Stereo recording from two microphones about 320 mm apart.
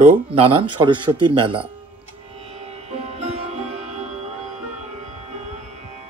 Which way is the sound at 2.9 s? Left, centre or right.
Centre.